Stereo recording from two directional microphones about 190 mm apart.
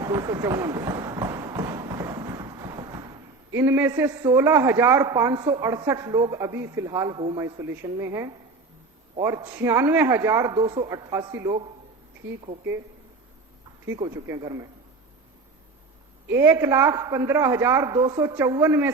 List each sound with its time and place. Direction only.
0.0 s speech: 20° right (ahead or behind)
13.8 s speech: 15° right (ahead or behind)
16.3 s speech: 15° right (ahead or behind)